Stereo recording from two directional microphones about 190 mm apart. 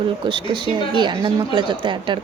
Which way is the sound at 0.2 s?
25° right (ahead or behind).